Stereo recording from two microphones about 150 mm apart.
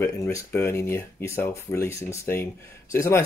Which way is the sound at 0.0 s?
20° left (ahead or behind).